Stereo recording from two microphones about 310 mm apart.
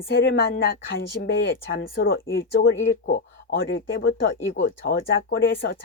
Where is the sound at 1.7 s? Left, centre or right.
Left.